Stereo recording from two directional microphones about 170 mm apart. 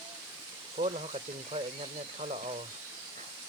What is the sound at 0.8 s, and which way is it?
Speech, 40° right (ahead or behind).